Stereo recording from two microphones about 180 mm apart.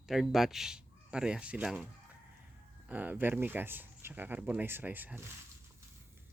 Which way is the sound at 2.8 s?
10° right (ahead or behind).